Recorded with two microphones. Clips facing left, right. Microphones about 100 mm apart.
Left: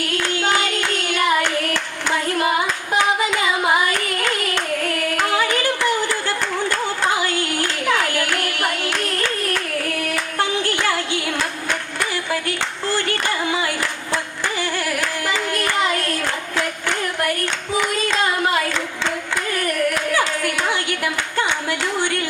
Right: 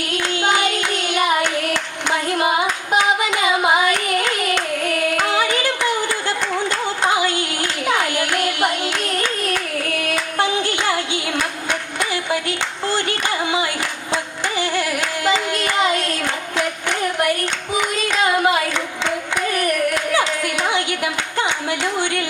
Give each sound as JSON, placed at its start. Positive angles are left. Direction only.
{"t": 0.0, "sound": "hands", "side_deg": -20}
{"t": 14.1, "sound": "carnatic music", "side_deg": -20}